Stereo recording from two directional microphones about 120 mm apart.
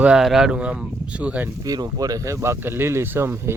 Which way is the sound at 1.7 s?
30° right (ahead or behind).